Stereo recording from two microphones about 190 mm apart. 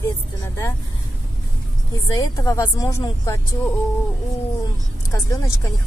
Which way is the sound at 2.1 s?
15° left (ahead or behind).